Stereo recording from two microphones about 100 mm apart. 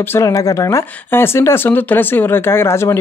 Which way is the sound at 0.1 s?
30° left (ahead or behind).